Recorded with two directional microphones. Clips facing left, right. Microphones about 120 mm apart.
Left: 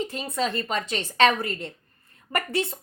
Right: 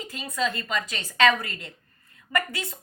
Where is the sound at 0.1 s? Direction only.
30° left (ahead or behind).